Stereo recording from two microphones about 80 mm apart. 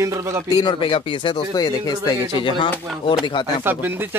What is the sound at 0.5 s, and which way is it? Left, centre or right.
Speech, left.